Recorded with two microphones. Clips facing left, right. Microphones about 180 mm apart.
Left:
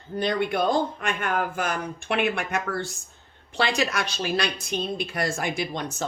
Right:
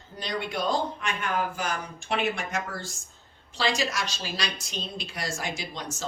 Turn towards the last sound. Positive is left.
turn(degrees=60)  # may be behind; listen again after turning